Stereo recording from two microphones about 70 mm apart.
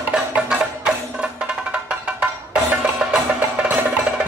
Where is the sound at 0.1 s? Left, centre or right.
Centre.